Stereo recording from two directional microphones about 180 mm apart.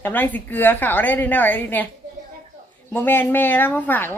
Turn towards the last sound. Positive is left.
turn(degrees=10)  # may be behind; listen again after turning